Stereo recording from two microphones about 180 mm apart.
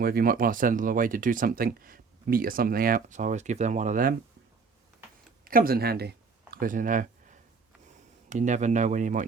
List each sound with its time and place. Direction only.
0.0 s speech: 55° right (ahead or behind)
5.5 s speech: 55° right (ahead or behind)